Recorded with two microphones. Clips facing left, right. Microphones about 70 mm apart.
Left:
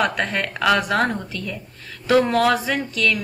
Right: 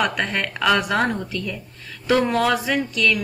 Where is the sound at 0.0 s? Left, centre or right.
Centre.